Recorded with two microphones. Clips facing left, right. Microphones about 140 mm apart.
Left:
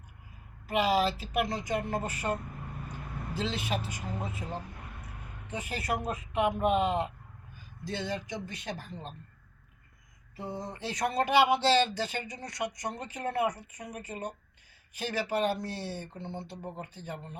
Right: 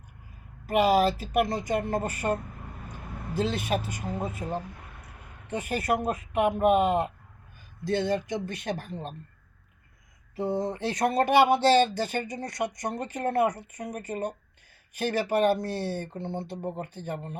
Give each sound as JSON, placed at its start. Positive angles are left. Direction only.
{"t": 0.7, "sound": "speech", "side_deg": -50}
{"t": 5.5, "sound": "speech", "side_deg": -55}
{"t": 10.3, "sound": "speech", "side_deg": -60}